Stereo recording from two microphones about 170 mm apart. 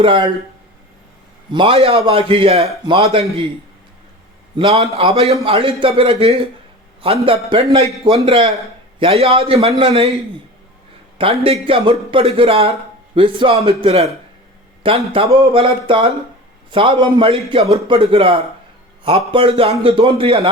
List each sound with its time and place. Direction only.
0.0 s speech: 30° right (ahead or behind)
1.5 s a man's voice: 35° right (ahead or behind)
4.5 s a man's voice: 35° right (ahead or behind)
11.4 s a man's voice: 30° right (ahead or behind)